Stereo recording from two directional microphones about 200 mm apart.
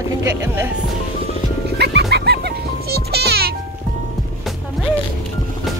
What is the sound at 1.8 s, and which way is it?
Music, 55° right (ahead or behind).